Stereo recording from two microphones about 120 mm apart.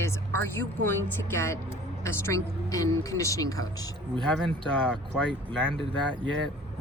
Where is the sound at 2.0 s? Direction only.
25° left (ahead or behind).